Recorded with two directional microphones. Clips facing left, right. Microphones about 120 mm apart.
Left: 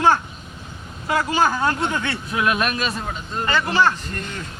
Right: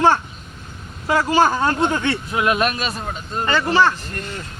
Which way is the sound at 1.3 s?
35° right (ahead or behind).